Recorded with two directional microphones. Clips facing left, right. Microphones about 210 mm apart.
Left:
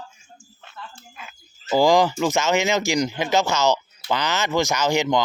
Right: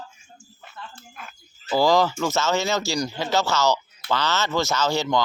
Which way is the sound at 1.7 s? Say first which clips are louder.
Left 2 dB; 15° left (ahead or behind).